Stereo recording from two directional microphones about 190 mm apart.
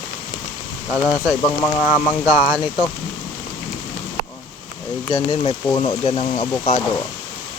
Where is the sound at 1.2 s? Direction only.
10° left (ahead or behind).